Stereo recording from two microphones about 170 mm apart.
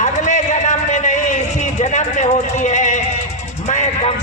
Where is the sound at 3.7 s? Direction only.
45° left (ahead or behind).